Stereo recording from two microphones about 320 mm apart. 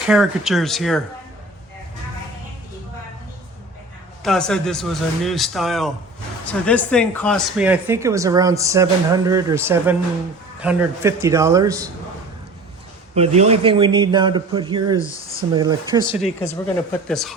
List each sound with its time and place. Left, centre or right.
0.1 s speech: centre
4.2 s speech: centre
13.1 s speech: centre
16.1 s speech: centre